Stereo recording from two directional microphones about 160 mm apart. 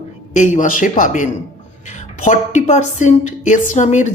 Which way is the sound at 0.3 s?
50° left (ahead or behind).